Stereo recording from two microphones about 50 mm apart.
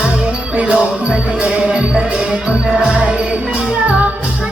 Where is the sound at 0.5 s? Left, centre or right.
Right.